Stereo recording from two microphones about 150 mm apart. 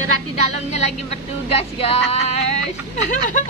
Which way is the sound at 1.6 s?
40° left (ahead or behind).